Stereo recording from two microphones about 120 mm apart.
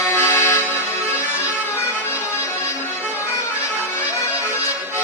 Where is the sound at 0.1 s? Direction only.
20° left (ahead or behind).